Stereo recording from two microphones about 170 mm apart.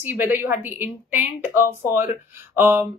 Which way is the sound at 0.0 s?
10° right (ahead or behind).